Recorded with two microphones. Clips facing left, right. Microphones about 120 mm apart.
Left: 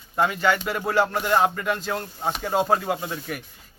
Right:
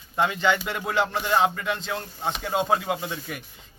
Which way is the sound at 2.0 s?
5° left (ahead or behind).